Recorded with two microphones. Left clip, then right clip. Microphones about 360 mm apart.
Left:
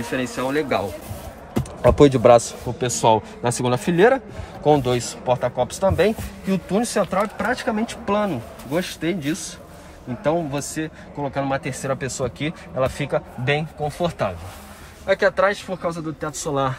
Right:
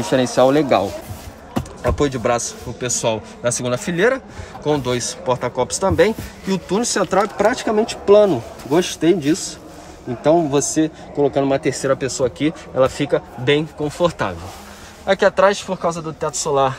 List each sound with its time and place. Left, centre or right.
0.2 s a man's voice: centre
1.8 s a man's voice: centre